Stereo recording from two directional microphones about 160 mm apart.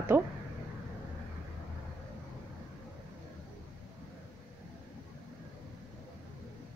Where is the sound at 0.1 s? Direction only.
10° right (ahead or behind).